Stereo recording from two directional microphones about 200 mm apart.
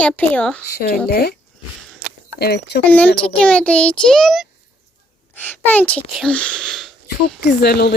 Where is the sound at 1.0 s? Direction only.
50° left (ahead or behind).